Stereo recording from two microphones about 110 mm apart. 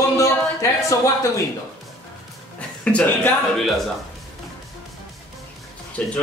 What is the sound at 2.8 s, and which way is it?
Speech, 15° left (ahead or behind).